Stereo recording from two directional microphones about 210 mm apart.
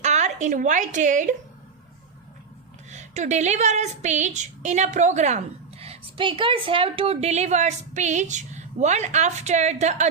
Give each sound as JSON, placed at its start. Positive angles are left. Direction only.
{"t": 0.0, "sound": "a woman's voice", "side_deg": -35}
{"t": 2.9, "sound": "a woman's voice", "side_deg": -35}